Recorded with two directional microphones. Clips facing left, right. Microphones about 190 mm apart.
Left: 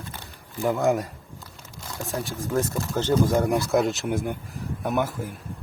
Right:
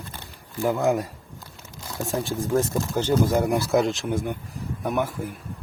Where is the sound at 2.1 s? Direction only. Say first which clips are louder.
Right 4 dB; 25° right (ahead or behind).